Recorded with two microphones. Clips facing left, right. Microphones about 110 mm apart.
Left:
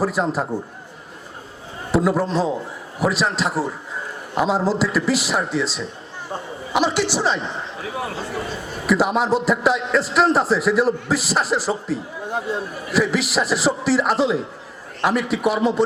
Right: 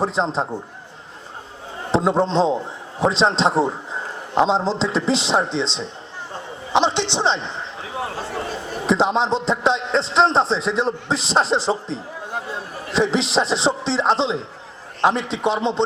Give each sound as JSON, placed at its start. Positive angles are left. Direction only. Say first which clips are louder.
{"t": 0.0, "sound": "a man's voice", "louder": "even", "side_deg": -25}
{"t": 1.9, "sound": "a man's voice", "louder": "right 1 dB", "side_deg": -25}